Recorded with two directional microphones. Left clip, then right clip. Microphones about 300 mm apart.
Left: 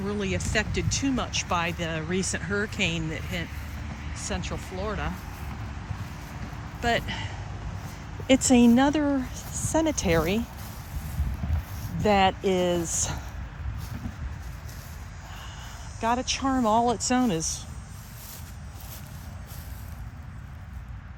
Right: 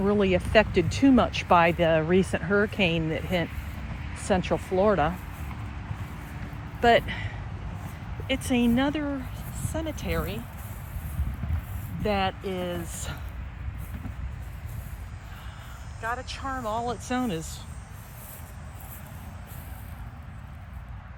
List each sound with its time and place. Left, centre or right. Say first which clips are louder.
0.0 s speech: right 7 dB; centre
6.8 s speech: right 6 dB; centre
8.3 s speech: left 6 dB; centre
12.0 s speech: left 6 dB; centre
16.0 s speech: left 6 dB; left